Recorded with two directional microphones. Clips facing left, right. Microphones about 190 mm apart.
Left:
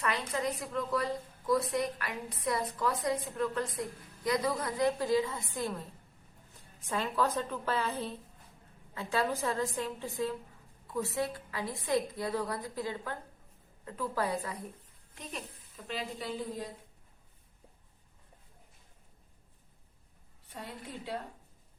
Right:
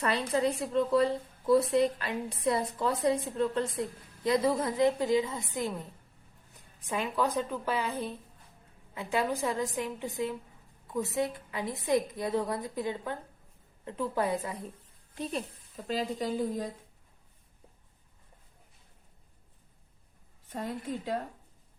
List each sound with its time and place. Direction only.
0.0 s a woman's voice: 35° right (ahead or behind)
15.1 s a woman's voice: 35° right (ahead or behind)
20.5 s a woman's voice: 45° right (ahead or behind)